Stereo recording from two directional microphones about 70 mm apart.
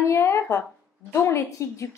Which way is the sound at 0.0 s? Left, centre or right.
Left.